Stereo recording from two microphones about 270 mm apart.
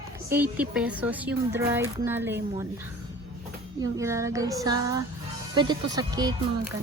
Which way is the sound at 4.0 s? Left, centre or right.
Centre.